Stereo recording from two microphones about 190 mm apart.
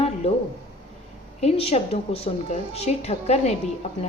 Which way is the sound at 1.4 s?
35° left (ahead or behind).